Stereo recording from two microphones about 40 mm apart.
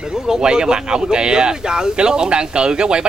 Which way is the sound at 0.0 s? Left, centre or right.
Centre.